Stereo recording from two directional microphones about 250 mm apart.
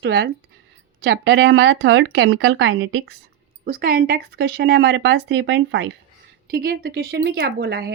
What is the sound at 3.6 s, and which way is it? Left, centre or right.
A woman's voice, right.